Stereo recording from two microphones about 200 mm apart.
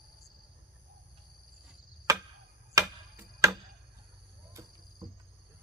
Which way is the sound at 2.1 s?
15° right (ahead or behind).